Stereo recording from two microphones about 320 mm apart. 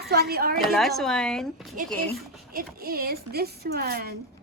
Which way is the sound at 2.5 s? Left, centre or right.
Right.